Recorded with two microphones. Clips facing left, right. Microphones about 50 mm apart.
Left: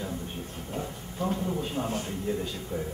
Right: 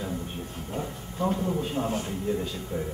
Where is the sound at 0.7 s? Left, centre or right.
Centre.